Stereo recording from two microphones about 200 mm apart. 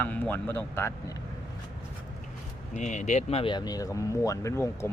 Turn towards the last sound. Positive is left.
turn(degrees=15)  # may be behind; listen again after turning